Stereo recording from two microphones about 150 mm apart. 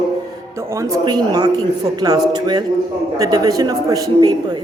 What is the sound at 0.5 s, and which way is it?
A woman's voice, 20° right (ahead or behind).